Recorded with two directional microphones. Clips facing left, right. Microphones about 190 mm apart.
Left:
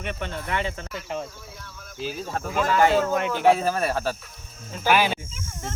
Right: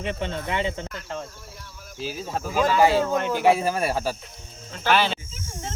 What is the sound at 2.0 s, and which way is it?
Speech, 5° right (ahead or behind).